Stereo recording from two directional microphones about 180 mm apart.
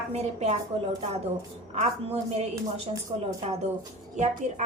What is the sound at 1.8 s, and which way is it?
Speech, 35° right (ahead or behind).